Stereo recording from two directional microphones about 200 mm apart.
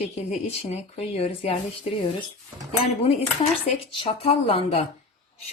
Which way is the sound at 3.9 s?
25° left (ahead or behind).